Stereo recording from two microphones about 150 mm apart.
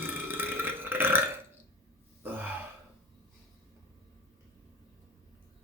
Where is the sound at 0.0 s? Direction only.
15° right (ahead or behind).